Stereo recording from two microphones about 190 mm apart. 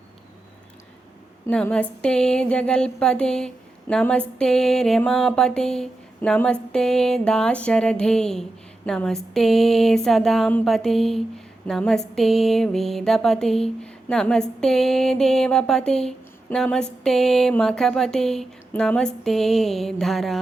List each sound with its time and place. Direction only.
1.5 s speech: 5° left (ahead or behind)